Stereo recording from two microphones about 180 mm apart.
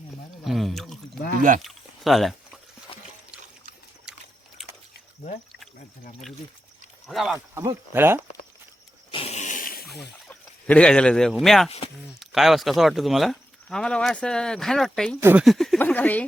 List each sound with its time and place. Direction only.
0.4 s a sound: centre (ahead or behind)
1.4 s speech: 45° right (ahead or behind)
1.6 s a sound: centre (ahead or behind)
7.1 s speech: centre (ahead or behind)
7.3 s speech: 15° right (ahead or behind)
9.1 s a sound: 35° left (ahead or behind)
10.2 s speech: 5° left (ahead or behind)
15.2 s speech: 10° right (ahead or behind)
15.4 s speech: centre (ahead or behind)